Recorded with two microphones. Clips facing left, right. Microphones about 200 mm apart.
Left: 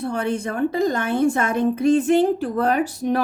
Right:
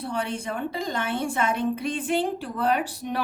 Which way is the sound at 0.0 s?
45° left (ahead or behind).